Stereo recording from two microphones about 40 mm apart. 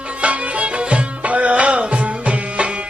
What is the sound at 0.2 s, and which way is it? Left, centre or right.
Music, right.